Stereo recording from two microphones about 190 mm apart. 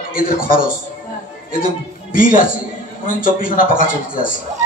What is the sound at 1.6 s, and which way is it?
A man's voice, 45° left (ahead or behind).